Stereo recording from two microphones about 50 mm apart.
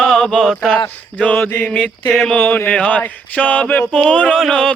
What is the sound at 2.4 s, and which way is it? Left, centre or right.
Speech, left.